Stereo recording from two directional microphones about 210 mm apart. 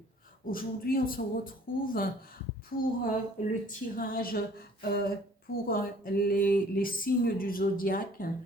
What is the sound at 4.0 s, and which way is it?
A woman's voice, 45° left (ahead or behind).